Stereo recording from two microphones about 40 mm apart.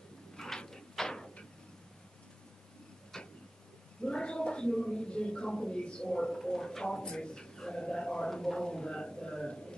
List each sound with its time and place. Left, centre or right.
0.7 s door: centre
3.1 s tick-tock: centre
4.0 s speech: left